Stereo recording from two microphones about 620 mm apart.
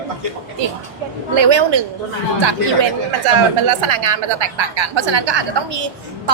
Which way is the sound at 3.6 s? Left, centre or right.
Right.